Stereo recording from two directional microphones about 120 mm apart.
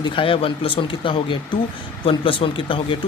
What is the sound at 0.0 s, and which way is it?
Speech, 45° left (ahead or behind).